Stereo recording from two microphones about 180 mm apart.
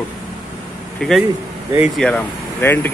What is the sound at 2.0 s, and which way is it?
Speech, 10° left (ahead or behind).